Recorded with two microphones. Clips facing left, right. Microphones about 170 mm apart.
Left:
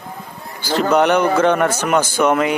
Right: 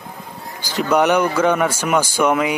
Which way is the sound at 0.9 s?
10° right (ahead or behind).